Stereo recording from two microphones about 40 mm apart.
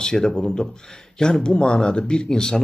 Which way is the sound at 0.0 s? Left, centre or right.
Centre.